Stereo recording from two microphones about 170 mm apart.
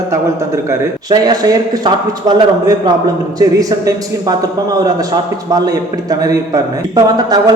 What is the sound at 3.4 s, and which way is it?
A man's voice, 20° right (ahead or behind).